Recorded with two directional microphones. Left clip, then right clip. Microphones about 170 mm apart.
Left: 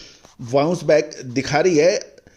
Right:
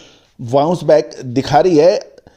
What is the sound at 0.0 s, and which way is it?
A man's voice, 40° right (ahead or behind).